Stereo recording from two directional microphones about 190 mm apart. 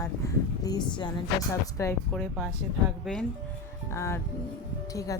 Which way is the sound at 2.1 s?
5° left (ahead or behind).